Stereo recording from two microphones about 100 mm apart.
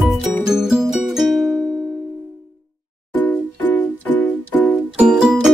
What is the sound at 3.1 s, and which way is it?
Music, 15° left (ahead or behind).